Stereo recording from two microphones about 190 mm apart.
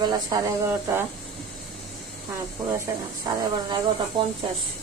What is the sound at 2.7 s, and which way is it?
Speech, 15° right (ahead or behind).